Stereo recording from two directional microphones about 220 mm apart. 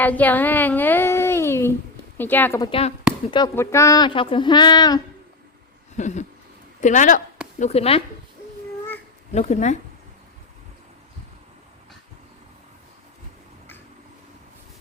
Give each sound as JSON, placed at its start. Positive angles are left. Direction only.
{"t": 0.0, "sound": "a woman's voice", "side_deg": 5}
{"t": 6.0, "sound": "speech", "side_deg": 35}
{"t": 9.3, "sound": "speech", "side_deg": 30}